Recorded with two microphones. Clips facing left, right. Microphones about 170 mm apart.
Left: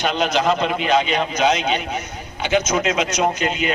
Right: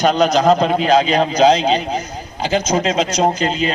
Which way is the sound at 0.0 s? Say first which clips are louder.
Right 6 dB; 40° right (ahead or behind).